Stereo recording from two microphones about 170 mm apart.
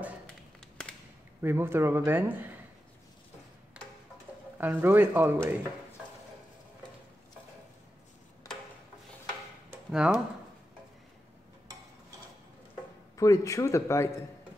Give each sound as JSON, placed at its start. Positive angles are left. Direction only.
{"t": 1.4, "sound": "speech", "side_deg": -15}
{"t": 4.6, "sound": "speech", "side_deg": -10}
{"t": 9.7, "sound": "tick-tock", "side_deg": -5}
{"t": 13.1, "sound": "speech", "side_deg": 20}